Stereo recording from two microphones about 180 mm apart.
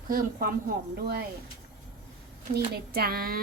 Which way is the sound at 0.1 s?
55° right (ahead or behind).